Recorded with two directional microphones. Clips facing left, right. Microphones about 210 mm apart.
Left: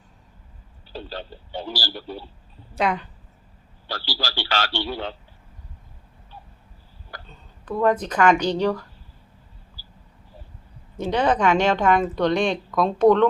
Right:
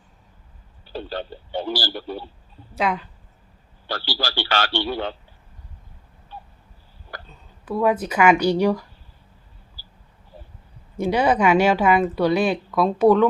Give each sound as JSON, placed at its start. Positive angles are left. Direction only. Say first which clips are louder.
{"t": 0.9, "sound": "a man's voice", "louder": "right 4 dB", "side_deg": -60}
{"t": 2.7, "sound": "a woman's voice", "louder": "even", "side_deg": 0}
{"t": 3.8, "sound": "a man's voice", "louder": "right 3 dB", "side_deg": -55}
{"t": 7.3, "sound": "speech", "louder": "right 1 dB", "side_deg": -5}
{"t": 10.9, "sound": "speech", "louder": "right 2 dB", "side_deg": -10}